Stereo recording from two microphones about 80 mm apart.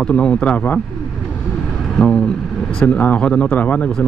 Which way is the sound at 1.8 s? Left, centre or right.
Centre.